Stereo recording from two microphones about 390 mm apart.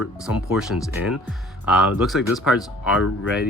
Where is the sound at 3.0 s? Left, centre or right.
Left.